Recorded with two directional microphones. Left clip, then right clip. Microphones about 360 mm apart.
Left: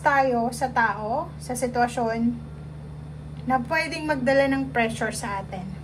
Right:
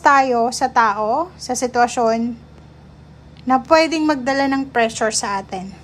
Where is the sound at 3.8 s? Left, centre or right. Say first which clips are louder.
Right 8 dB; centre.